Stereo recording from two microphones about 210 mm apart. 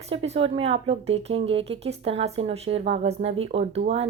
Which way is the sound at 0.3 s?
25° right (ahead or behind).